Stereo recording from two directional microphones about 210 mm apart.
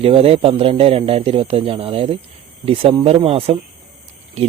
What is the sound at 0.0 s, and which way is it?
A man's voice, 25° right (ahead or behind).